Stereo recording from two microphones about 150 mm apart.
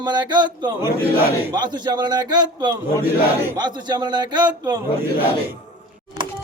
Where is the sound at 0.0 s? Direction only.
30° right (ahead or behind).